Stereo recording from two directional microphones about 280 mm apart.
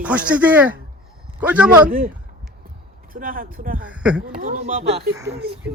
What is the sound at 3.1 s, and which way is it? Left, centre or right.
Speech, right.